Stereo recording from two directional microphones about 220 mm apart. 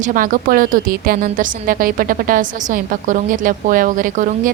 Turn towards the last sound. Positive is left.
turn(degrees=-35)  # may be behind; listen again after turning